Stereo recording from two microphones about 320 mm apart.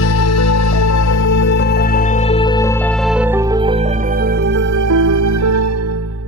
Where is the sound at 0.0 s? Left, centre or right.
Left.